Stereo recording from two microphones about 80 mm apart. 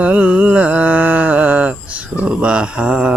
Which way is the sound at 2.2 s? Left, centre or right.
Centre.